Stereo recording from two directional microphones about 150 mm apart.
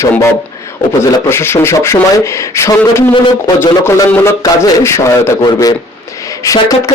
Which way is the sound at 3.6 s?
15° left (ahead or behind).